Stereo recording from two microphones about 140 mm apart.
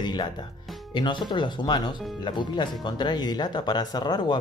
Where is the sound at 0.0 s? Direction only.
30° left (ahead or behind).